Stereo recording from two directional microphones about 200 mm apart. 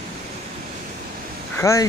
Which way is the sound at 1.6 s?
15° left (ahead or behind).